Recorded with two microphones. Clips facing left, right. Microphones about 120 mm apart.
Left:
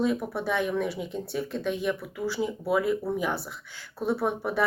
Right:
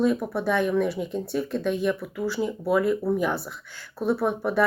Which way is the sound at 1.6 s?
15° left (ahead or behind).